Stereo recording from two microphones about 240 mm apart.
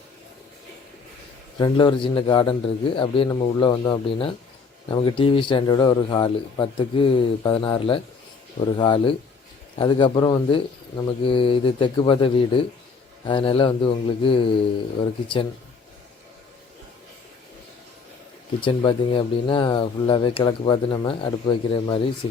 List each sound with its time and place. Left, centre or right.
1.5 s speech: centre
18.6 s speech: centre